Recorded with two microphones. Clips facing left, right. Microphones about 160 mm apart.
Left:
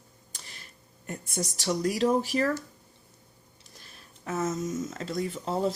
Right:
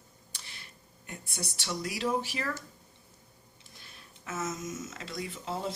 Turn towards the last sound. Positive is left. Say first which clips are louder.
# left 7 dB
turn(degrees=40)  # may be behind; listen again after turning